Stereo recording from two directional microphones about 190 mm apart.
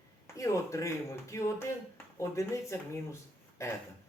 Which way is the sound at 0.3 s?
15° left (ahead or behind).